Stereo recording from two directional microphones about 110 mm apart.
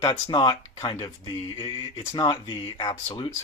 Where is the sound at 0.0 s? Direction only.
45° left (ahead or behind).